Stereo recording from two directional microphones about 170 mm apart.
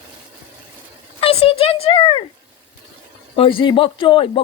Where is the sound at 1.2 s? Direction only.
35° left (ahead or behind).